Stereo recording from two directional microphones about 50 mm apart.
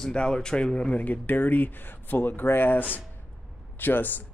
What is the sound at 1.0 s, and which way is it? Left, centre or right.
Speech, left.